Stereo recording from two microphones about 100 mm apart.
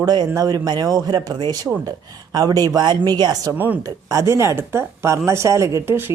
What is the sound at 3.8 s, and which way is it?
A woman's voice, 35° right (ahead or behind).